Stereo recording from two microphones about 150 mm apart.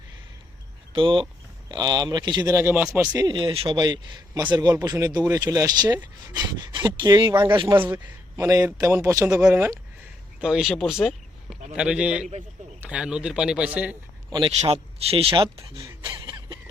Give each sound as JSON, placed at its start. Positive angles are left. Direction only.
{"t": 0.9, "sound": "a man's voice", "side_deg": -35}
{"t": 3.2, "sound": "speech", "side_deg": -30}
{"t": 3.8, "sound": "a man's voice", "side_deg": -25}
{"t": 7.3, "sound": "a man's voice", "side_deg": -15}
{"t": 7.5, "sound": "speech", "side_deg": -30}
{"t": 7.8, "sound": "a man's voice", "side_deg": -15}
{"t": 10.4, "sound": "a man's voice", "side_deg": -5}
{"t": 14.3, "sound": "a man's voice", "side_deg": -30}
{"t": 14.6, "sound": "speech", "side_deg": -40}
{"t": 15.8, "sound": "a sound", "side_deg": -25}